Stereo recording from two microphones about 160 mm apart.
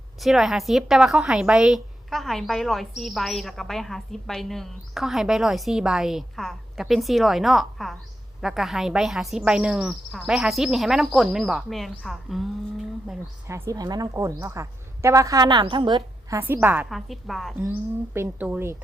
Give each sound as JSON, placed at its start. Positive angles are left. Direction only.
{"t": 0.2, "sound": "a woman's voice", "side_deg": 0}
{"t": 13.5, "sound": "a woman's voice", "side_deg": -20}
{"t": 16.4, "sound": "speech", "side_deg": -15}
{"t": 16.9, "sound": "a woman's voice", "side_deg": 0}
{"t": 17.6, "sound": "speech", "side_deg": -15}